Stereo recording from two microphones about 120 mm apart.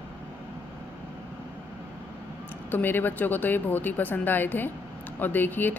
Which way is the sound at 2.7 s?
15° left (ahead or behind).